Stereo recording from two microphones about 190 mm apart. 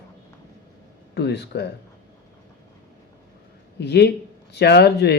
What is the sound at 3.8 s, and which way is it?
Speech, 60° left (ahead or behind).